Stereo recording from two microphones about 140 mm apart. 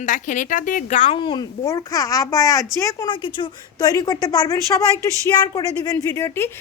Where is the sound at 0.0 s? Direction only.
65° left (ahead or behind).